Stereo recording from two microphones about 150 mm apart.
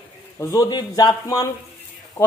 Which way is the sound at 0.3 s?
20° left (ahead or behind).